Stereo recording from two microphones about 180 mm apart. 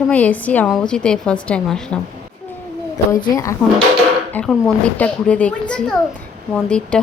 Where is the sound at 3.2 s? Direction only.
20° left (ahead or behind).